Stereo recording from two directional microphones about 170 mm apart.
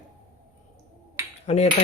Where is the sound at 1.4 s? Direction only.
40° left (ahead or behind).